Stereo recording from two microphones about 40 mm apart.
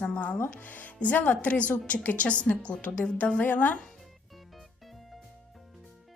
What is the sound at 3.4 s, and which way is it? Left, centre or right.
Speech, left.